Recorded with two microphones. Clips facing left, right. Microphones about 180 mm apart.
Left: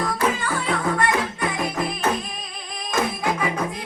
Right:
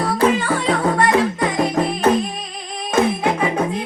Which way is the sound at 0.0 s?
35° right (ahead or behind).